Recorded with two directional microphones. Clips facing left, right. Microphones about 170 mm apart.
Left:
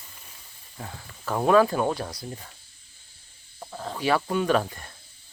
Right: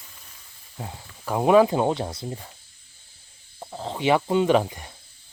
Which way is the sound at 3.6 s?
20° right (ahead or behind).